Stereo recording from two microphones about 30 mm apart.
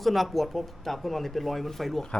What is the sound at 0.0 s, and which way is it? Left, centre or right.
Speech, centre.